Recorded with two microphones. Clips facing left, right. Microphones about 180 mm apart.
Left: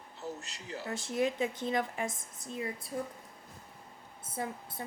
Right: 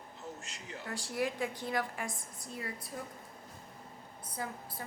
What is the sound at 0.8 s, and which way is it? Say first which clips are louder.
Speech: left 4 dB; 20° left (ahead or behind).